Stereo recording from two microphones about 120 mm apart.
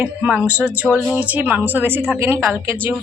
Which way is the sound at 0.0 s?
15° right (ahead or behind).